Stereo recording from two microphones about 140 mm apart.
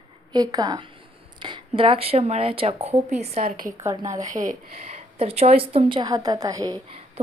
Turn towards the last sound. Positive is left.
turn(degrees=-25)  # may be behind; listen again after turning